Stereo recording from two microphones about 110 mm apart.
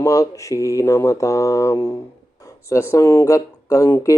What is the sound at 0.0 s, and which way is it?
Mantra, 30° left (ahead or behind).